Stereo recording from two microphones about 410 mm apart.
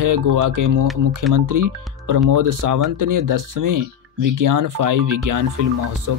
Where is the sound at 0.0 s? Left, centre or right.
Right.